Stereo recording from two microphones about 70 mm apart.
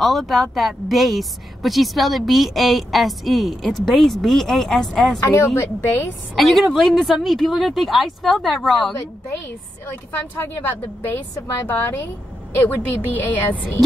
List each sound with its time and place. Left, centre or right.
0.0 s speech: centre
5.3 s a woman's voice: left
6.3 s speech: centre
10.6 s a woman's voice: left